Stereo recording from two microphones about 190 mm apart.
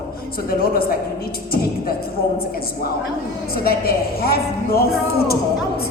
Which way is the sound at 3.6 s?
50° left (ahead or behind).